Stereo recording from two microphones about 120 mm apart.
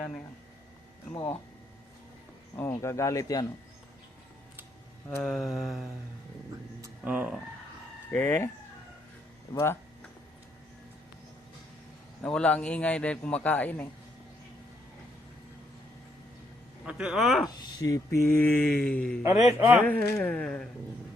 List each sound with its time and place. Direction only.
1.1 s speech: 20° left (ahead or behind)
2.6 s speech: 20° left (ahead or behind)
5.0 s mantra: 5° left (ahead or behind)
7.0 s speech: 15° right (ahead or behind)
8.1 s speech: 20° left (ahead or behind)
9.5 s speech: 25° left (ahead or behind)
12.2 s a man's voice: 10° left (ahead or behind)
16.8 s mantra: 5° right (ahead or behind)
17.5 s speech: 35° left (ahead or behind); by 19.2 s 10° left (ahead or behind)
19.2 s a man's voice: 20° right (ahead or behind)
19.8 s a man's voice: 15° left (ahead or behind)